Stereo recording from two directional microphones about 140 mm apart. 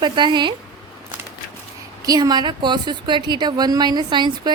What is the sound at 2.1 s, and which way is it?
A woman's voice, 30° right (ahead or behind).